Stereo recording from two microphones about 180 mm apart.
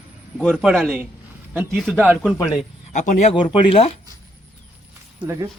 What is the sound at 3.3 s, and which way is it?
Speech, 30° left (ahead or behind).